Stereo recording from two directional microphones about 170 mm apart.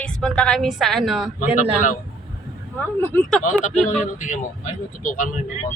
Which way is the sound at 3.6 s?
45° left (ahead or behind).